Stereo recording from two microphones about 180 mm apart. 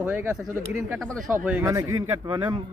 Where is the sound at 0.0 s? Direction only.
10° right (ahead or behind).